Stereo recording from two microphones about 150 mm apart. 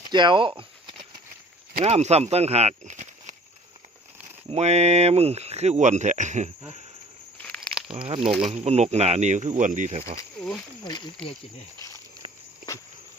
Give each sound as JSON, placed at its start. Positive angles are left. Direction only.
{"t": 0.1, "sound": "speech", "side_deg": -30}
{"t": 1.8, "sound": "speech", "side_deg": -45}
{"t": 4.4, "sound": "speech", "side_deg": -45}
{"t": 7.3, "sound": "a sound", "side_deg": 10}
{"t": 7.9, "sound": "speech", "side_deg": -40}